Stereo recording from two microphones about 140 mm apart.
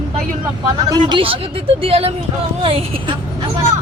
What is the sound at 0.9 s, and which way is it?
A woman's voice, 30° right (ahead or behind).